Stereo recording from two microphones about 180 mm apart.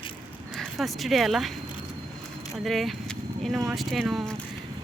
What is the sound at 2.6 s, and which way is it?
Speech, centre (ahead or behind).